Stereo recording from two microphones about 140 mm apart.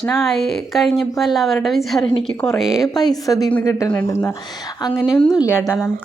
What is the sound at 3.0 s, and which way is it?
A woman's voice, 25° left (ahead or behind).